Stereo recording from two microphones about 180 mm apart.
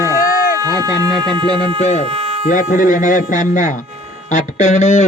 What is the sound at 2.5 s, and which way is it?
Speech, 45° left (ahead or behind).